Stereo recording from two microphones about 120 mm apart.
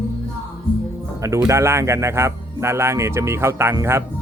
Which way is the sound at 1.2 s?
25° right (ahead or behind).